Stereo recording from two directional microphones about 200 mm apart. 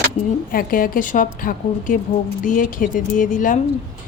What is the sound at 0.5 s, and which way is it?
A woman's voice, 45° left (ahead or behind).